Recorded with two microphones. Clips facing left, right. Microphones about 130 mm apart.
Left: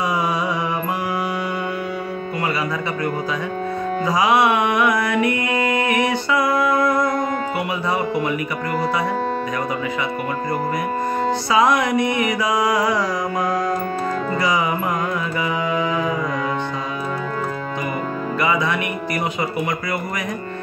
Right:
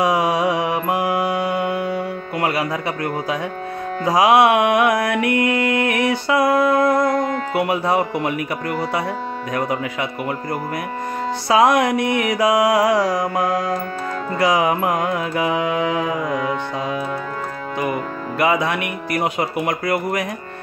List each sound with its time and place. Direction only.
0.0 s mantra: 75° right (ahead or behind)
4.0 s music: 65° right (ahead or behind)
11.5 s mantra: 60° right (ahead or behind)
18.4 s mantra: 60° right (ahead or behind)